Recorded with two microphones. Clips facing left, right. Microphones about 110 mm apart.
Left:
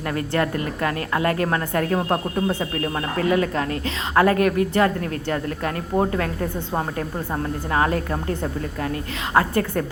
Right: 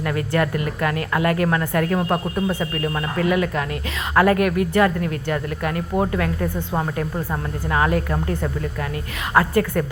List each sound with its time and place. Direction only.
0.1 s a woman's voice: 30° left (ahead or behind)
7.7 s a woman's voice: 35° left (ahead or behind)